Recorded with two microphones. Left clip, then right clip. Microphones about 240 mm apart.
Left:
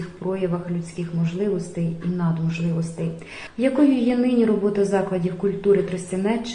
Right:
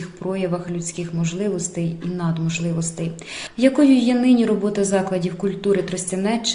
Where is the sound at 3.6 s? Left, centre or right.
Right.